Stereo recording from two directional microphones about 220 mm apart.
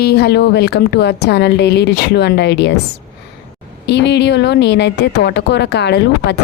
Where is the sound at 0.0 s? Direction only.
50° left (ahead or behind).